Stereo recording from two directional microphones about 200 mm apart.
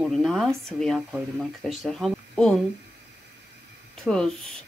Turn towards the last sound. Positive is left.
turn(degrees=5)  # may be behind; listen again after turning